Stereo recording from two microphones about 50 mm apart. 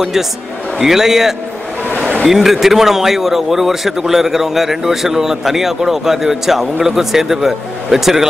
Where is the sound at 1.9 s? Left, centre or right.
Left.